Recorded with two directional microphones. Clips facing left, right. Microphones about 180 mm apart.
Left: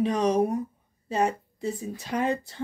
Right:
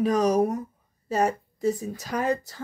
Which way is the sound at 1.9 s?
30° left (ahead or behind).